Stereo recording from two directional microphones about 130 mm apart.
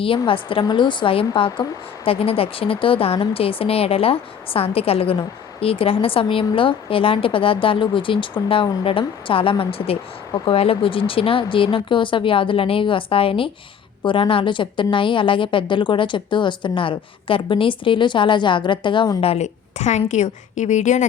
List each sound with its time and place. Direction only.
0.0 s a woman's voice: 45° left (ahead or behind)
19.2 s a woman's voice: 55° left (ahead or behind)